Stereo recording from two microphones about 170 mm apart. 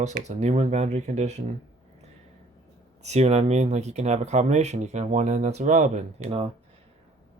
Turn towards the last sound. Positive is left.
turn(degrees=-40)  # may be behind; listen again after turning